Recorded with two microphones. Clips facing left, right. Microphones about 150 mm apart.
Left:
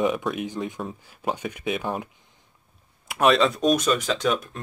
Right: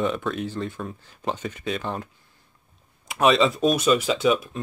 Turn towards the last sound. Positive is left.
turn(degrees=-5)  # may be behind; listen again after turning